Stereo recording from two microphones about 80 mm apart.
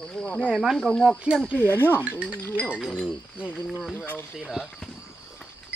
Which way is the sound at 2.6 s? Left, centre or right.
Centre.